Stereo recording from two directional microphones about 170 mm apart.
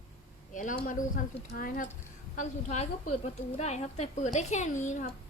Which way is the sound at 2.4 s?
40° left (ahead or behind).